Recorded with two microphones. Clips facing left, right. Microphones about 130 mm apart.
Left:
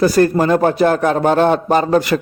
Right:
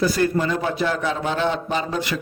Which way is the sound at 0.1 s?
50° left (ahead or behind).